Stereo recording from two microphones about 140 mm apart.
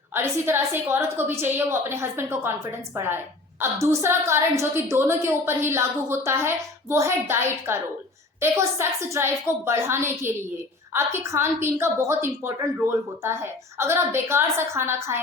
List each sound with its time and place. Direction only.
0.1 s a woman's voice: 15° right (ahead or behind)